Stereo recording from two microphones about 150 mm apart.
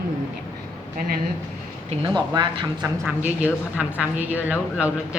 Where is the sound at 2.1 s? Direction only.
30° right (ahead or behind).